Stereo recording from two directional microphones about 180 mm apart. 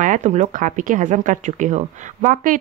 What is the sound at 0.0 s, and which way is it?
Speech, 45° right (ahead or behind).